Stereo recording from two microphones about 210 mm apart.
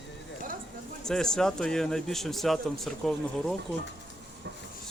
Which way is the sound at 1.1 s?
5° left (ahead or behind).